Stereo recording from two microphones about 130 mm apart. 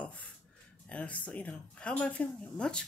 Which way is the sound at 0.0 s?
10° left (ahead or behind).